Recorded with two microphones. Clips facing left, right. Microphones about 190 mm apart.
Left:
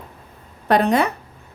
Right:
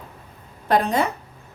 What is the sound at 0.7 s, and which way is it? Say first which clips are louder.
Speech: left 3 dB; 65° left (ahead or behind).